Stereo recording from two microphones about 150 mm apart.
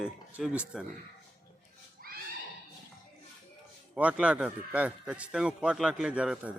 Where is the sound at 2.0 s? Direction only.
85° right.